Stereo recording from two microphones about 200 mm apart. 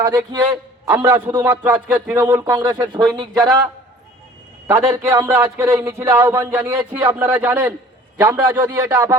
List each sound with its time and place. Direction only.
0.0 s speech: 15° right (ahead or behind)
4.6 s speech: 10° right (ahead or behind)